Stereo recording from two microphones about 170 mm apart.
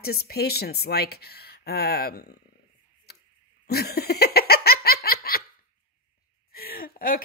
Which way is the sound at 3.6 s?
65° left (ahead or behind).